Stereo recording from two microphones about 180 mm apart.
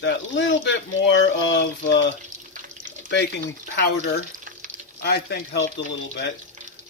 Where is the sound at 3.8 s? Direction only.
60° left (ahead or behind).